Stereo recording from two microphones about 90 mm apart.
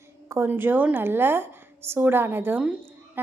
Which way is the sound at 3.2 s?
20° right (ahead or behind).